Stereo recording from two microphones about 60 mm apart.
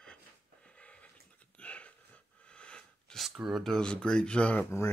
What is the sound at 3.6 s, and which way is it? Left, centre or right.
Speech, centre.